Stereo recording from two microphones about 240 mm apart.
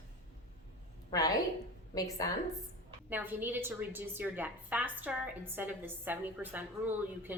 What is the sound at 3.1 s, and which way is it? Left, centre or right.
A woman's voice, centre.